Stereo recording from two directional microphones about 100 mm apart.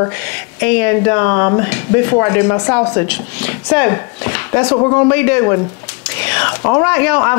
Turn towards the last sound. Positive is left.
turn(degrees=20)  # may be behind; listen again after turning